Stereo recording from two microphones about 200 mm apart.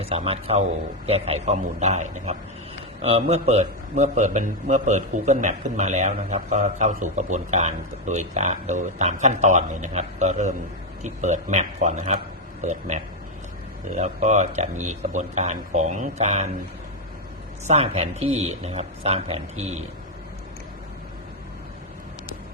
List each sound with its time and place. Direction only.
0.0 s a man's voice: 30° right (ahead or behind)
13.9 s a man's voice: 35° right (ahead or behind)
17.7 s a man's voice: 30° right (ahead or behind)